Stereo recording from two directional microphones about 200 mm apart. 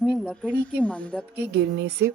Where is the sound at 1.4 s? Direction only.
55° right (ahead or behind).